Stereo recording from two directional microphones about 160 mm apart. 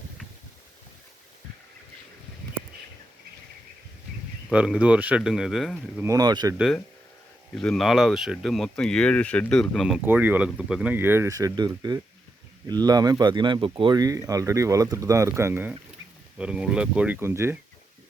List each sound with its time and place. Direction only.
4.5 s speech: 5° right (ahead or behind)
6.0 s speech: 20° right (ahead or behind)
7.5 s speech: centre (ahead or behind)
10.0 s speech: 10° right (ahead or behind)